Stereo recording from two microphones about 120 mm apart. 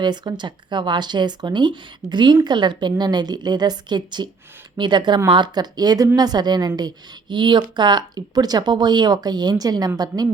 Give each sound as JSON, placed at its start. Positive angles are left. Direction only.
{"t": 0.0, "sound": "speech", "side_deg": -40}